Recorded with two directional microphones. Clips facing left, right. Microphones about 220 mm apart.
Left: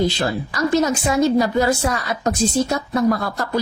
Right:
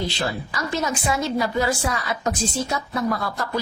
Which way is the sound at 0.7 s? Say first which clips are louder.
Left 6 dB; 40° left (ahead or behind).